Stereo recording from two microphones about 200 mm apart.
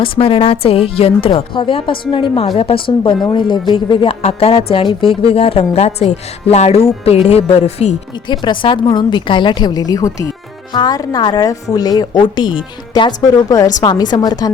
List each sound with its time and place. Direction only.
0.0 s speech: 25° left (ahead or behind)
8.3 s speech: 25° left (ahead or behind)